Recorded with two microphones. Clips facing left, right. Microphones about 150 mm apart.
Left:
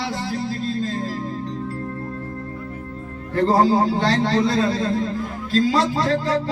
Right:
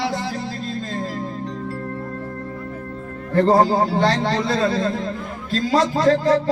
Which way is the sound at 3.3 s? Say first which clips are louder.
Right 1 dB; 50° right (ahead or behind).